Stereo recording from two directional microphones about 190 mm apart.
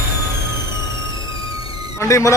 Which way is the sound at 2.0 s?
15° left (ahead or behind).